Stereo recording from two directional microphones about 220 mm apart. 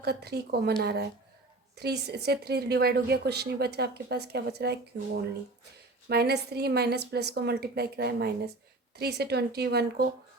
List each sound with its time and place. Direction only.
0.0 s speech: 45° right (ahead or behind)